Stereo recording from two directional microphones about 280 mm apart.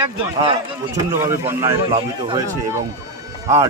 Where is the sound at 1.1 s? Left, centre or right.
Centre.